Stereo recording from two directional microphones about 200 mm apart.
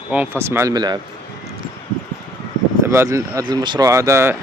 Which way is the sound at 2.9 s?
15° right (ahead or behind).